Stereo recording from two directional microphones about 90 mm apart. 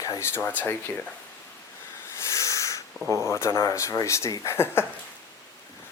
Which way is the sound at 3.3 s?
30° left (ahead or behind).